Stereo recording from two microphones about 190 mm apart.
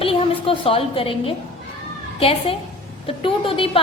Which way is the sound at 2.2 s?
30° left (ahead or behind).